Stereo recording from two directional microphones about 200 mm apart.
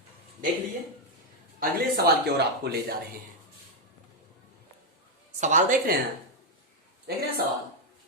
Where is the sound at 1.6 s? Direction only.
50° right (ahead or behind).